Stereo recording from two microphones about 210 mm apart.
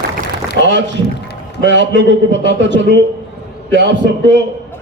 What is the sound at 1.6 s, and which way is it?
A man's voice, 60° right (ahead or behind).